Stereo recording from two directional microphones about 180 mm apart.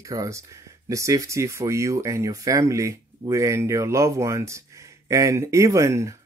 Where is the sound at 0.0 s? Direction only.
20° right (ahead or behind).